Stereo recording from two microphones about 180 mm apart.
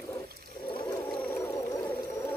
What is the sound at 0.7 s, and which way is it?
Whale vocalization, 25° left (ahead or behind).